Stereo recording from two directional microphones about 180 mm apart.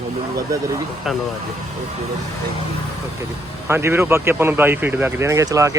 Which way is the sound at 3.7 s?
15° right (ahead or behind).